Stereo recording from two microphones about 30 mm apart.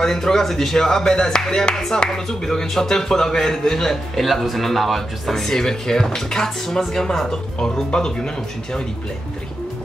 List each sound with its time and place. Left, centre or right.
0.0 s speech: centre
0.7 s speech: centre
2.0 s speech: centre
6.8 s speech: centre
7.2 s speech: left